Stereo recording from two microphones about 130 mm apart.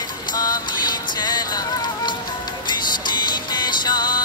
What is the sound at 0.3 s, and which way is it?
Music, 30° left (ahead or behind).